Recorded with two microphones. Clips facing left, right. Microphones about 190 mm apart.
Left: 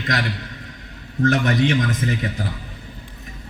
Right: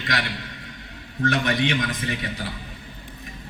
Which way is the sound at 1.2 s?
40° left (ahead or behind).